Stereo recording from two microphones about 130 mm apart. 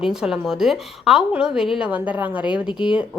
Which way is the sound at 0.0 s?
5° right (ahead or behind).